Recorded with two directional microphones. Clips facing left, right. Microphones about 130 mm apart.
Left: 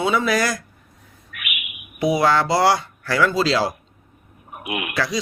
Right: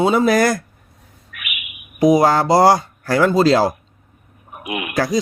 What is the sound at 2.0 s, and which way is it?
Speech, 40° right (ahead or behind).